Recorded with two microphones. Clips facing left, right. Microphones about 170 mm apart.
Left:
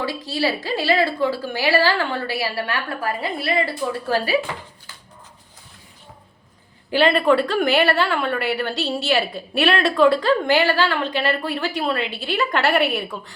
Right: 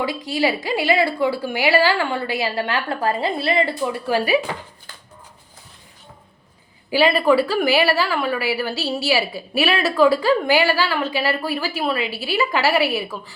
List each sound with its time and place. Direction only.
0.0 s a woman's voice: 15° right (ahead or behind)
4.0 s a woman's voice: 15° right (ahead or behind)
6.9 s a woman's voice: 5° right (ahead or behind)